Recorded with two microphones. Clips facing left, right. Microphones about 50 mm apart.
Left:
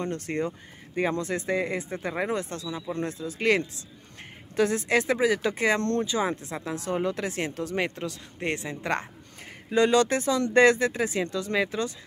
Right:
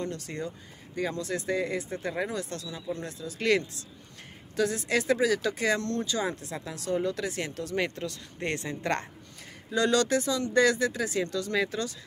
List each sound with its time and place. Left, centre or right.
0.0 s speech: left
5.8 s speech: left
6.0 s speech: left
9.7 s speech: left